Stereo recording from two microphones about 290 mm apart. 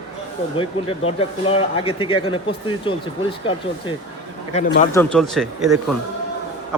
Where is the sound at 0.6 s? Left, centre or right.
Centre.